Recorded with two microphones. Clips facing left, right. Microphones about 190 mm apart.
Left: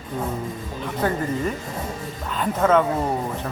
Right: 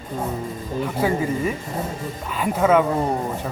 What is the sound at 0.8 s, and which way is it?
Speech, 5° right (ahead or behind).